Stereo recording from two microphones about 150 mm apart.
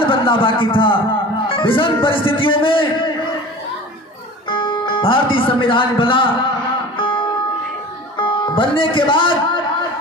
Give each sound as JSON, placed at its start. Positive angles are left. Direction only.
{"t": 0.0, "sound": "a man's voice", "side_deg": 35}
{"t": 4.4, "sound": "speech", "side_deg": 30}
{"t": 6.9, "sound": "music", "side_deg": 35}
{"t": 8.2, "sound": "speech", "side_deg": 35}